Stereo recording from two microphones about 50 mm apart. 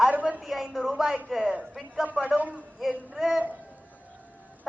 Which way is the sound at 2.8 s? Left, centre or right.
Centre.